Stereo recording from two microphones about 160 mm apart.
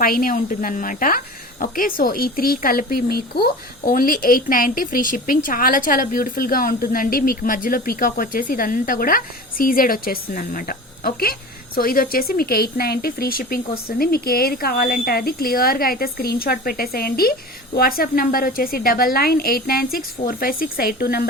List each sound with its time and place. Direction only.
0.0 s a woman's voice: 65° left (ahead or behind)